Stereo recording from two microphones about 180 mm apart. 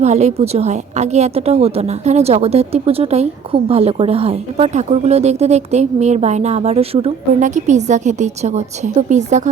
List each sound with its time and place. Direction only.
0.0 s a woman's voice: 40° right (ahead or behind)